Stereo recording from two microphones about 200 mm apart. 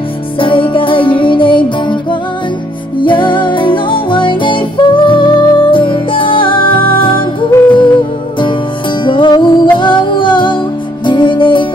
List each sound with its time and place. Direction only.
0.4 s music: 25° left (ahead or behind)
7.5 s music: 15° left (ahead or behind)
9.0 s music: 25° left (ahead or behind)